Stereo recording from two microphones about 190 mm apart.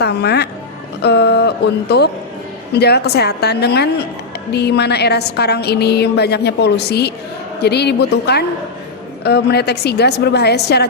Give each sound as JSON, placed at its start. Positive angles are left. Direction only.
{"t": 0.0, "sound": "a woman's voice", "side_deg": 60}